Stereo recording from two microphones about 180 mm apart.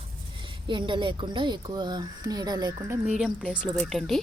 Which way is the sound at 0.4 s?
25° right (ahead or behind).